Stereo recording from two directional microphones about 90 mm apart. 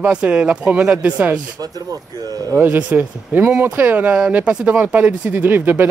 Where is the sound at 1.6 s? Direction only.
45° right (ahead or behind).